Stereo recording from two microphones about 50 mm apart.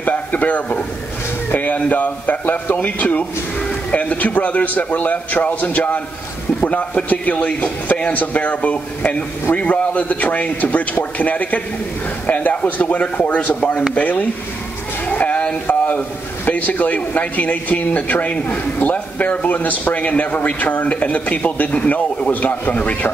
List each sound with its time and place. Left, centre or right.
0.0 s a man's voice: left
15.0 s a sound: left
15.6 s a man's voice: left